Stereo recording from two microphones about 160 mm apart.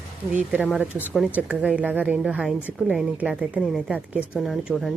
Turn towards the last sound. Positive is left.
turn(degrees=0)  # may be behind; listen again after turning